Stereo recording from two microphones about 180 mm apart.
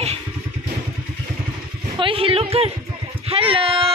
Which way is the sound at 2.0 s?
30° right (ahead or behind).